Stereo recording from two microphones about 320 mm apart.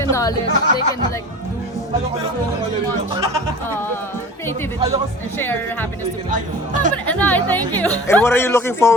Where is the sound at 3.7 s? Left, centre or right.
Centre.